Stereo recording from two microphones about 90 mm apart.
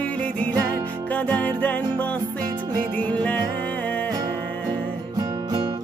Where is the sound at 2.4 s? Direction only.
50° right (ahead or behind).